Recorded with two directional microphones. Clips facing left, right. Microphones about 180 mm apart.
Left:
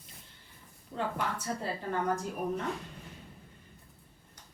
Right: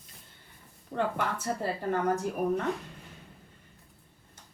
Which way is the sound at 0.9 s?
60° right (ahead or behind).